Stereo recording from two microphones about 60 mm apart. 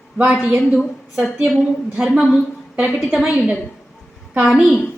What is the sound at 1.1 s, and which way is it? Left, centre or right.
Speech, right.